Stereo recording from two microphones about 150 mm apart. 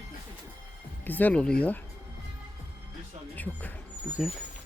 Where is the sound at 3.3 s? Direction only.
10° left (ahead or behind).